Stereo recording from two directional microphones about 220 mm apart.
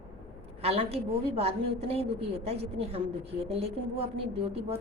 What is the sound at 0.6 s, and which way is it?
A woman's voice, 25° right (ahead or behind).